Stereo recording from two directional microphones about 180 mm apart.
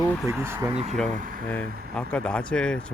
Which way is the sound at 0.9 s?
5° left (ahead or behind).